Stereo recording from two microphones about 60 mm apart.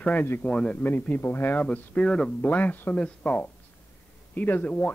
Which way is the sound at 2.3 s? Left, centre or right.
Left.